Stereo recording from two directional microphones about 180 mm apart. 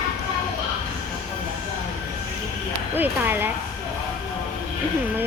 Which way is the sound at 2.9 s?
10° right (ahead or behind).